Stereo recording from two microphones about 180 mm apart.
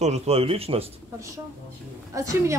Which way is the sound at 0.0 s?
35° right (ahead or behind).